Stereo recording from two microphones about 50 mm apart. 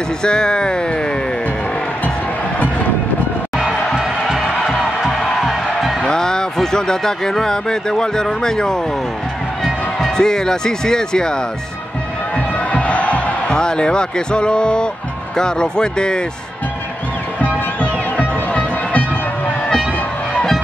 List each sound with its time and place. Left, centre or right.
0.2 s speech: centre
3.5 s music: centre
6.0 s speech: centre
9.9 s speech: centre
12.4 s music: left
13.6 s speech: centre
17.7 s music: left